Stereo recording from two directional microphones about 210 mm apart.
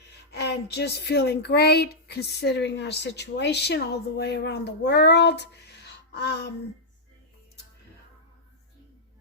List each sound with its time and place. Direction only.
0.3 s speech: 50° left (ahead or behind)